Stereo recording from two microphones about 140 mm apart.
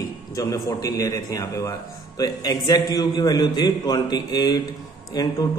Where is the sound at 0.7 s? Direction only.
25° left (ahead or behind).